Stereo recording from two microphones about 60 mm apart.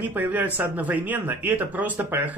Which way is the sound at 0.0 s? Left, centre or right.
Right.